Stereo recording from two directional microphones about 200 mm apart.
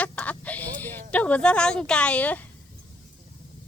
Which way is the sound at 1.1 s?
5° left (ahead or behind).